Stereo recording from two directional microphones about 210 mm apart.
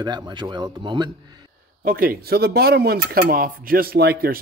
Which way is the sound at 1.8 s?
45° right (ahead or behind).